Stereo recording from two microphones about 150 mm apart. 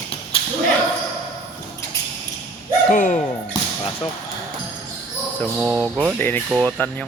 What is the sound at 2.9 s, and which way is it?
Speech, 60° left (ahead or behind).